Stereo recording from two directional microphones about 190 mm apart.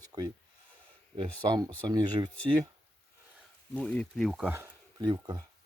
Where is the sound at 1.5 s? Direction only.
20° right (ahead or behind).